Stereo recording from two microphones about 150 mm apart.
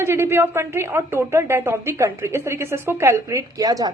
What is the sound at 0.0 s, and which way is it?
Speech, 15° right (ahead or behind).